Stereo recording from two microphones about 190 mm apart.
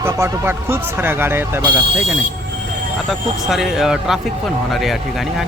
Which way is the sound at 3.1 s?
Centre (ahead or behind).